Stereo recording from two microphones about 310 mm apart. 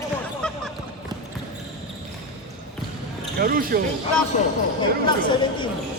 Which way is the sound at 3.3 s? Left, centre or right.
Right.